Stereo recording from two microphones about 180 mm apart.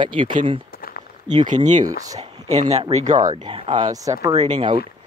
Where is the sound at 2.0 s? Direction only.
20° right (ahead or behind).